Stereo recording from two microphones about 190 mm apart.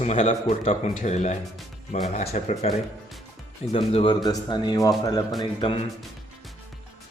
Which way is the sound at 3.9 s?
30° left (ahead or behind).